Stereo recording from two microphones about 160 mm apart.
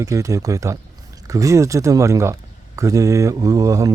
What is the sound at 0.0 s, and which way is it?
Speech, 20° right (ahead or behind).